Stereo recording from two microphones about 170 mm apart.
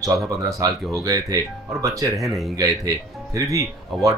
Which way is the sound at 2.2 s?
Centre (ahead or behind).